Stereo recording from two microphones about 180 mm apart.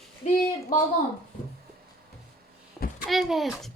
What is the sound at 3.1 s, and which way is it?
Speech, centre (ahead or behind).